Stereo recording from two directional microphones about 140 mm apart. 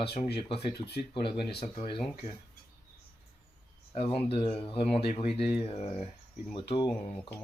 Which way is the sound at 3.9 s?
45° left (ahead or behind).